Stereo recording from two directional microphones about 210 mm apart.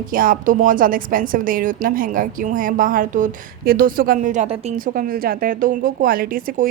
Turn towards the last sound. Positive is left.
turn(degrees=-40)  # may be behind; listen again after turning